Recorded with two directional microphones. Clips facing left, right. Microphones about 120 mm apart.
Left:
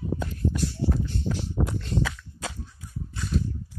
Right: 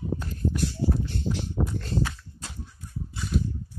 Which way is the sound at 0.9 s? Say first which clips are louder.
Even; 90° left.